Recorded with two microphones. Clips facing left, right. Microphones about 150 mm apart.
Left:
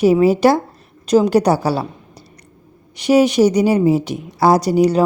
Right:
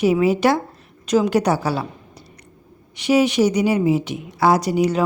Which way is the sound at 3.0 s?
40° left (ahead or behind).